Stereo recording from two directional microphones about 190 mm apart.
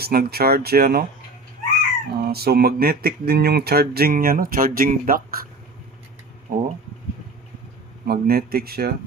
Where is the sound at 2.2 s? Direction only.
55° right (ahead or behind).